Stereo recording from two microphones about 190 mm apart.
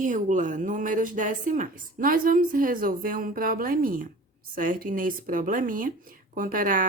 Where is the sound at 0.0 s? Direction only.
40° right (ahead or behind).